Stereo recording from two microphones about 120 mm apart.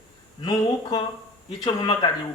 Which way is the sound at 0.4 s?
35° left (ahead or behind).